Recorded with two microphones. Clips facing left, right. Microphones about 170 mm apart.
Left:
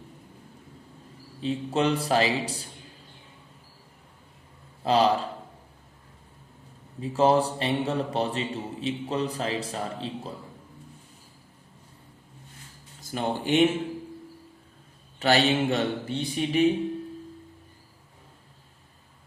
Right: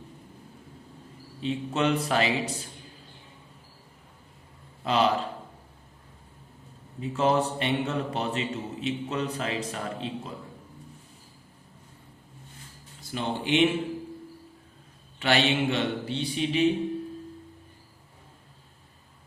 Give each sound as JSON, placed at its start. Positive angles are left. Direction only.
{"t": 1.4, "sound": "a man's voice", "side_deg": 35}
{"t": 4.8, "sound": "a man's voice", "side_deg": 35}
{"t": 7.0, "sound": "a man's voice", "side_deg": 35}
{"t": 13.0, "sound": "speech", "side_deg": 45}
{"t": 15.2, "sound": "a man's voice", "side_deg": 40}